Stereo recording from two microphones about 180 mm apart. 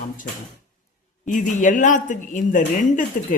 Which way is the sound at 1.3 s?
45° left (ahead or behind).